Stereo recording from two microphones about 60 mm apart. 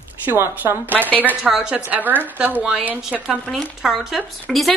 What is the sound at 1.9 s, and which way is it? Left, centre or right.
Speech, right.